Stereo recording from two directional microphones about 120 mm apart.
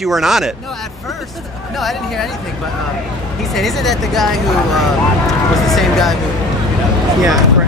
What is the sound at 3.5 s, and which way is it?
Speech, centre (ahead or behind).